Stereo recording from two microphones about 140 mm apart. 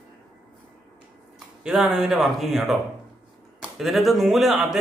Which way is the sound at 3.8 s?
Centre (ahead or behind).